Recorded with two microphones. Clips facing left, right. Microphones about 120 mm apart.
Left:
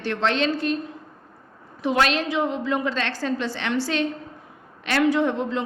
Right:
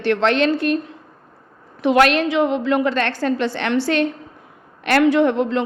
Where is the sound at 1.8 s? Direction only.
70° right (ahead or behind).